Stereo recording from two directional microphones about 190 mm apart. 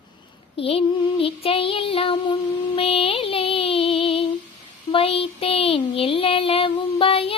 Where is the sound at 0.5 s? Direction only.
30° left (ahead or behind).